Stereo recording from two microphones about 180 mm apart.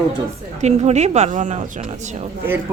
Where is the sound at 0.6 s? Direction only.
40° right (ahead or behind).